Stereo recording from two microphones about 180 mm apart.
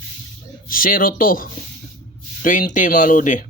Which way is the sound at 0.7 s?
50° left (ahead or behind).